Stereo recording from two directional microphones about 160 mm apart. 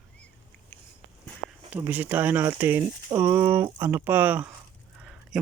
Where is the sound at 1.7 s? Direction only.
10° right (ahead or behind).